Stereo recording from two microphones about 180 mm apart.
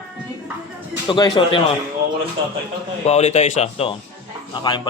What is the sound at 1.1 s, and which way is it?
Speech, 25° left (ahead or behind).